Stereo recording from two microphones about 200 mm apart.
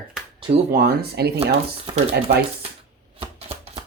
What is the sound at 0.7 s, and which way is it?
Speech, 50° right (ahead or behind).